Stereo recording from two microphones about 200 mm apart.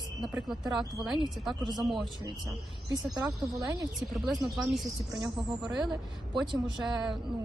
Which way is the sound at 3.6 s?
20° right (ahead or behind).